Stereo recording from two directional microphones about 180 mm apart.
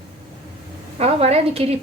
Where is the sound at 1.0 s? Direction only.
35° right (ahead or behind).